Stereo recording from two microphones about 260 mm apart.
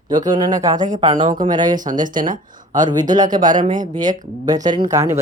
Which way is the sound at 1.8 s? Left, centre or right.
Right.